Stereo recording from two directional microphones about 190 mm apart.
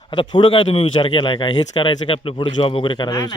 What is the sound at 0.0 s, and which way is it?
A man's voice, 25° left (ahead or behind).